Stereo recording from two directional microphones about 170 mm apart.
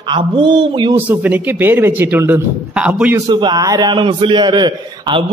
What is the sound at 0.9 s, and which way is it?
A man's voice, 10° right (ahead or behind).